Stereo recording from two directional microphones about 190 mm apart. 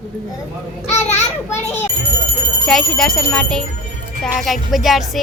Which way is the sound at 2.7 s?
Centre (ahead or behind).